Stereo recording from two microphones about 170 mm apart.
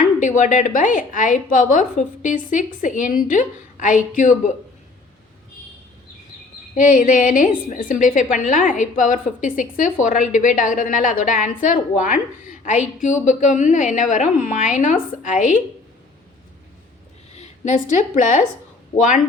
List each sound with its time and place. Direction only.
0.0 s a woman's voice: 50° left (ahead or behind)
6.7 s a woman's voice: 50° left (ahead or behind)
17.3 s a woman's voice: 45° left (ahead or behind)